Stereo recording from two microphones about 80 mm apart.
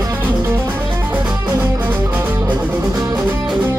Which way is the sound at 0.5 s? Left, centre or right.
Right.